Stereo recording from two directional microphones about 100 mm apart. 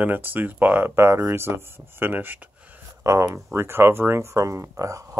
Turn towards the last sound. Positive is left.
turn(degrees=-35)  # may be behind; listen again after turning